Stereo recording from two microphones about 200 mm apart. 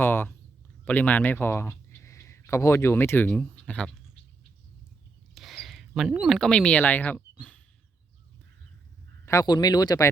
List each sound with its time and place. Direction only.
0.0 s a man's voice: 10° left (ahead or behind)
5.3 s speech: centre (ahead or behind)
9.2 s speech: 15° left (ahead or behind)